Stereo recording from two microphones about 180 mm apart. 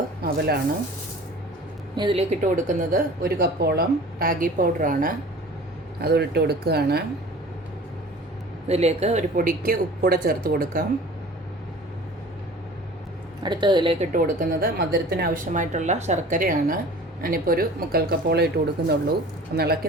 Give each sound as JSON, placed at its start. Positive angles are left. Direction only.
{"t": 0.2, "sound": "chopping", "side_deg": -60}
{"t": 2.0, "sound": "a woman's voice", "side_deg": -30}
{"t": 2.4, "sound": "speech", "side_deg": -45}
{"t": 6.0, "sound": "speech", "side_deg": -65}
{"t": 8.6, "sound": "speech", "side_deg": -35}
{"t": 13.4, "sound": "a woman's voice", "side_deg": -25}
{"t": 14.0, "sound": "speech", "side_deg": -50}